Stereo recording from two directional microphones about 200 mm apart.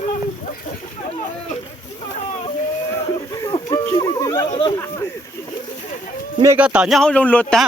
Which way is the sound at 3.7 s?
15° left (ahead or behind).